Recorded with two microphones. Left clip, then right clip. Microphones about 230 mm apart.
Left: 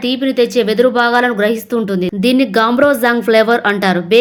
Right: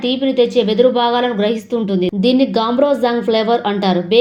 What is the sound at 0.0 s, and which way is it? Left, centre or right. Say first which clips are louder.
A woman's voice: even; left.